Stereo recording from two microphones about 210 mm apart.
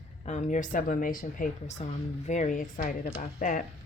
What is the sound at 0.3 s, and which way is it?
Speech, 35° left (ahead or behind).